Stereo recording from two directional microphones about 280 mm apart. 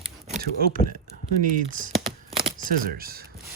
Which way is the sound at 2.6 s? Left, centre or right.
Right.